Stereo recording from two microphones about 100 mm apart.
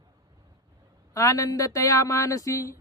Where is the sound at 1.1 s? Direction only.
35° left (ahead or behind).